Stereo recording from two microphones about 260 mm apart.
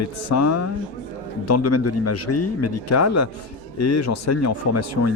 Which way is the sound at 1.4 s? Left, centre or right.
Left.